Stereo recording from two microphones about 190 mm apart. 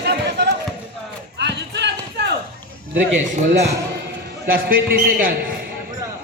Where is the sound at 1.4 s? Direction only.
65° right (ahead or behind).